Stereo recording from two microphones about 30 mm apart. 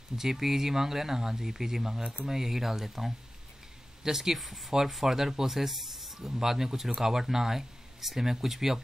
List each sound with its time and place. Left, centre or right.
0.2 s speech: centre
4.4 s speech: centre